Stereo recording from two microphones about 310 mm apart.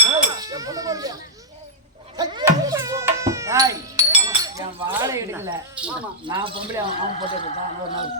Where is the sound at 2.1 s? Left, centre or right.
Centre.